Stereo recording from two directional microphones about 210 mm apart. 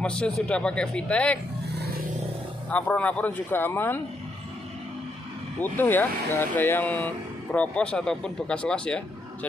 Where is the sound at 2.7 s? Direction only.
5° left (ahead or behind).